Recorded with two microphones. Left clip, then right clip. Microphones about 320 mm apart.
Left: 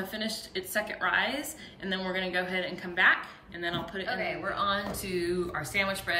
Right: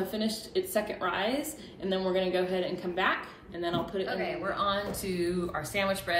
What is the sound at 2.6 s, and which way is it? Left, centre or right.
Speech, right.